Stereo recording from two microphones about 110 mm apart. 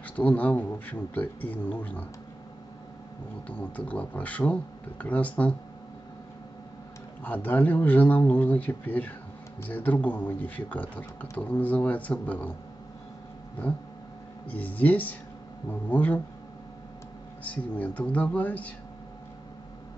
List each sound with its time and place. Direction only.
0.2 s speech: 15° left (ahead or behind)
3.4 s speech: 15° left (ahead or behind)
7.2 s speech: 15° left (ahead or behind)
14.5 s speech: 15° left (ahead or behind)
17.4 s speech: 15° left (ahead or behind)